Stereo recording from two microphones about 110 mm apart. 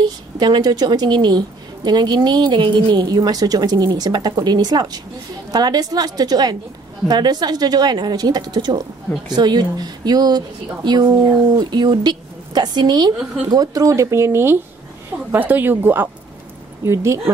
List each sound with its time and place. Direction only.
0.0 s a woman's voice: 40° right (ahead or behind); by 17.2 s 25° right (ahead or behind)